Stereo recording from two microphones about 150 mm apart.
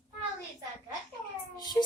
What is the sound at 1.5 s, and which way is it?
Child singing, 25° left (ahead or behind).